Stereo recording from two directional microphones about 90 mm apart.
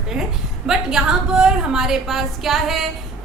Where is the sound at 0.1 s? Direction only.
5° right (ahead or behind).